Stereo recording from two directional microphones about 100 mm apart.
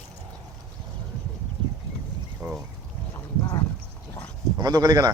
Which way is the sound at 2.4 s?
10° right (ahead or behind).